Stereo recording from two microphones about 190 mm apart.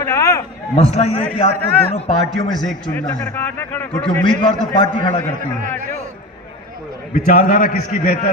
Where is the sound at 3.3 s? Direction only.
10° left (ahead or behind).